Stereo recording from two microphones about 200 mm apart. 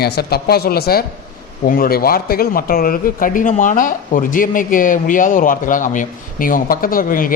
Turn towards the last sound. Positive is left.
turn(degrees=45)  # may be behind; listen again after turning